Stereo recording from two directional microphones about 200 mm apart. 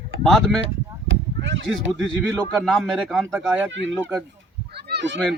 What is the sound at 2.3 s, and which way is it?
Speech, centre (ahead or behind).